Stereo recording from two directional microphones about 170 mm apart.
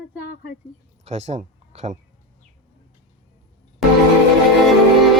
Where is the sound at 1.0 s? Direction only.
35° right (ahead or behind).